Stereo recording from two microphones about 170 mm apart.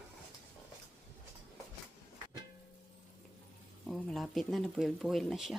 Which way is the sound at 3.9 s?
Centre (ahead or behind).